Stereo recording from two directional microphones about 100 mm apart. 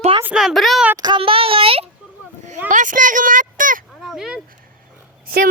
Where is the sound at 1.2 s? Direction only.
70° right (ahead or behind).